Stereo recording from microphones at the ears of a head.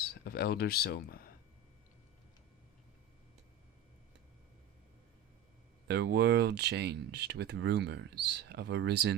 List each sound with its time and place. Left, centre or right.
0.0 s speech: left
5.9 s speech: right